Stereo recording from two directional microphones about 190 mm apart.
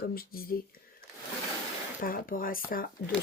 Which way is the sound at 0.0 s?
50° left (ahead or behind).